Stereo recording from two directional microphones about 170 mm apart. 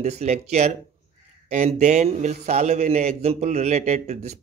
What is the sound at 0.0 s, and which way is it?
A man's voice, 40° right (ahead or behind).